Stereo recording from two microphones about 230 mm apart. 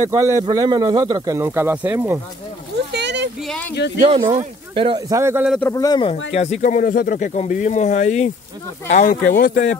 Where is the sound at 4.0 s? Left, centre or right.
Right.